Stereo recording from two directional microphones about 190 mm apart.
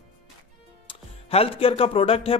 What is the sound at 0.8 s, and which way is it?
Speech, 30° left (ahead or behind).